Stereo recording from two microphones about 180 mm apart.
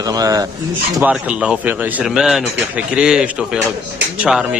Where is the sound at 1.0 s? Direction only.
5° right (ahead or behind).